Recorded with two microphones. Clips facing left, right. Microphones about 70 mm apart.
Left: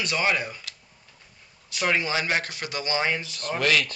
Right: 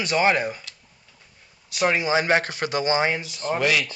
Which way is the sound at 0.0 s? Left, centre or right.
Right.